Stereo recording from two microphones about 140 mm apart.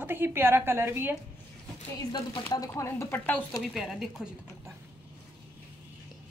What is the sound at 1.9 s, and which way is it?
Speech, 30° left (ahead or behind).